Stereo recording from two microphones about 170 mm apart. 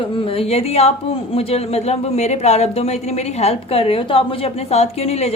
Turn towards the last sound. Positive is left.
turn(degrees=40)  # may be behind; listen again after turning